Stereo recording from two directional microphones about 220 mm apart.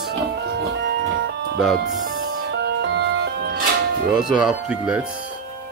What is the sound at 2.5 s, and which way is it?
Music, 55° right (ahead or behind).